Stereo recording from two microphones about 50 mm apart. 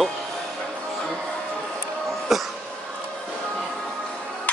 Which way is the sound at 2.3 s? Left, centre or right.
Centre.